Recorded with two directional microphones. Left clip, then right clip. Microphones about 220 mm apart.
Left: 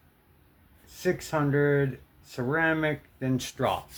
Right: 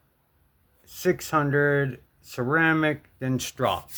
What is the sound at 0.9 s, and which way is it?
Speech, 45° right (ahead or behind).